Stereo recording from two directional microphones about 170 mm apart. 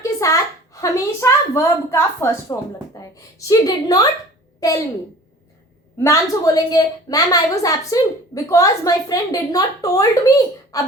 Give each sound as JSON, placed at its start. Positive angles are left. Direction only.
{"t": 0.0, "sound": "a woman's voice", "side_deg": 20}
{"t": 6.0, "sound": "speech", "side_deg": 20}